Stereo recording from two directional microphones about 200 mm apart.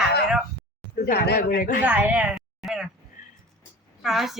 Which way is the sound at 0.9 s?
45° left (ahead or behind).